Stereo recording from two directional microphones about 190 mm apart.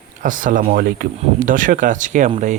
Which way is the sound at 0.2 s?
45° right (ahead or behind).